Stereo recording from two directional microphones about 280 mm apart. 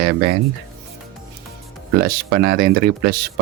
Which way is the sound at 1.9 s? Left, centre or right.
Right.